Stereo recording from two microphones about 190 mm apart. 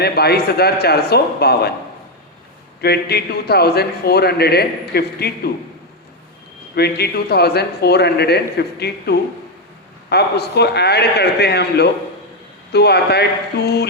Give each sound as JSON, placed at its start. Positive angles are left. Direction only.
{"t": 0.0, "sound": "a man's voice", "side_deg": 55}
{"t": 2.8, "sound": "a man's voice", "side_deg": 55}
{"t": 6.7, "sound": "a man's voice", "side_deg": 55}